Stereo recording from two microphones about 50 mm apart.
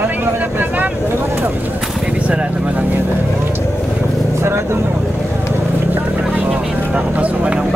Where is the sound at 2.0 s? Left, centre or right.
Right.